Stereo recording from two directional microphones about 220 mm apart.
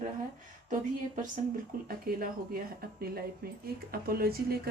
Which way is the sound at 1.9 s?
40° right (ahead or behind).